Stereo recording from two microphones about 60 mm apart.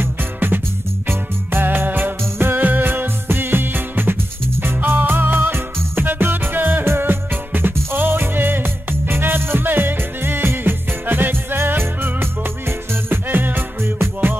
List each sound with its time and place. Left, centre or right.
0.0 s music: right